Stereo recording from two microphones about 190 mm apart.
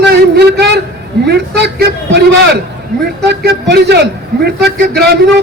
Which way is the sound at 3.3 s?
60° right (ahead or behind).